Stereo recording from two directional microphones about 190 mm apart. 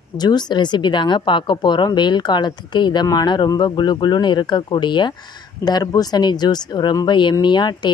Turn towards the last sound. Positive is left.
turn(degrees=25)  # may be behind; listen again after turning